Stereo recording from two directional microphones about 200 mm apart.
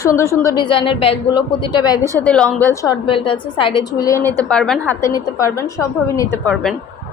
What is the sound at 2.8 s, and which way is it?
A woman's voice, 20° left (ahead or behind).